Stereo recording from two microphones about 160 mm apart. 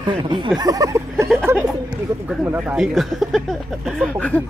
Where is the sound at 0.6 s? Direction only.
20° right (ahead or behind).